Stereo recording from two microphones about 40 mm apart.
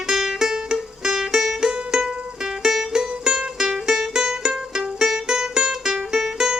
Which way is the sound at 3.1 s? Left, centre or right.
Centre.